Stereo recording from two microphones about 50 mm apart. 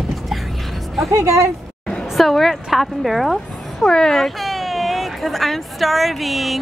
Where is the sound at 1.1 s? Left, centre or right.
Right.